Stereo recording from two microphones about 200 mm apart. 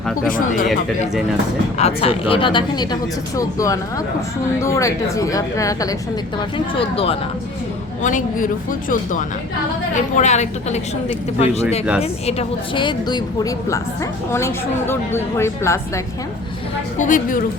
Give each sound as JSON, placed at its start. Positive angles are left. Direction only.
{"t": 0.3, "sound": "speech", "side_deg": 45}
{"t": 1.8, "sound": "a woman's voice", "side_deg": 30}
{"t": 6.7, "sound": "speech", "side_deg": 30}
{"t": 8.0, "sound": "a woman's voice", "side_deg": 40}
{"t": 10.2, "sound": "a woman's voice", "side_deg": 35}
{"t": 17.0, "sound": "a woman's voice", "side_deg": 40}